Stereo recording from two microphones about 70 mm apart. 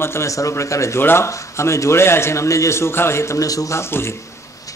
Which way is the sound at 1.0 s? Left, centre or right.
Left.